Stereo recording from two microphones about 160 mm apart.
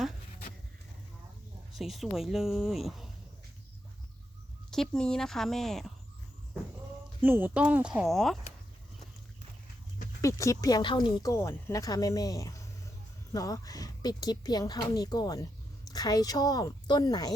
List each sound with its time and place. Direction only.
1.7 s speech: centre (ahead or behind)
4.7 s speech: 5° left (ahead or behind)
7.2 s speech: 15° right (ahead or behind)
10.2 s speech: 20° left (ahead or behind)